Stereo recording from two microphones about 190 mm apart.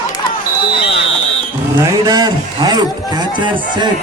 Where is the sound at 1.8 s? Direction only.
20° right (ahead or behind).